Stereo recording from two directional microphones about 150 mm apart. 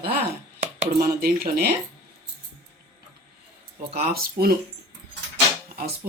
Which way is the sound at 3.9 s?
85° right.